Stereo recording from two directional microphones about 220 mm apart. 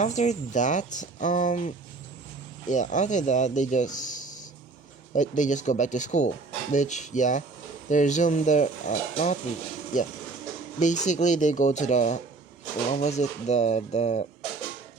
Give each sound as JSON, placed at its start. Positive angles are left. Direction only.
{"t": 0.0, "sound": "speech", "side_deg": 35}
{"t": 10.8, "sound": "speech", "side_deg": 35}